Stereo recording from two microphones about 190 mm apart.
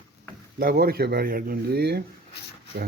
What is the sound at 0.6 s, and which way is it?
Speech, 55° right (ahead or behind).